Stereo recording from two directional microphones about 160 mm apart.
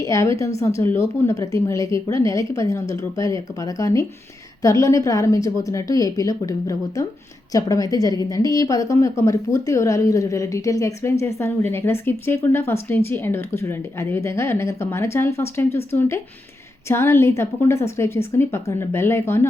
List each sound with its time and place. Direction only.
0.0 s a woman's voice: 20° left (ahead or behind)